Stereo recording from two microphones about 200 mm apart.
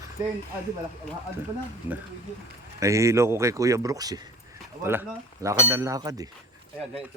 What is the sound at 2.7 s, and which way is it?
Speech, 15° right (ahead or behind).